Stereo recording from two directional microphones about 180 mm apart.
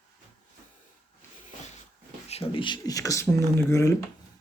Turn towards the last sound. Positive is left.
turn(degrees=15)  # may be behind; listen again after turning